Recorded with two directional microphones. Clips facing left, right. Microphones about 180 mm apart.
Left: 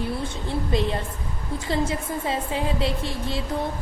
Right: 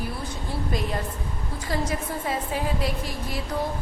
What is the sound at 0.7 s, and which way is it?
A woman's voice, 25° left (ahead or behind).